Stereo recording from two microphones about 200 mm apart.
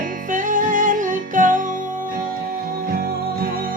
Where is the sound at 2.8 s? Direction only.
50° right (ahead or behind).